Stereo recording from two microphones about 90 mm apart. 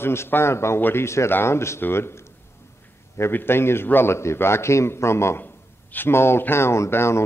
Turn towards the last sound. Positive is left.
turn(degrees=30)  # may be behind; listen again after turning